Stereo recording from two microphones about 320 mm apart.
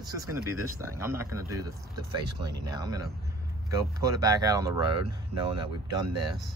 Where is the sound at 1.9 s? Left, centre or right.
Right.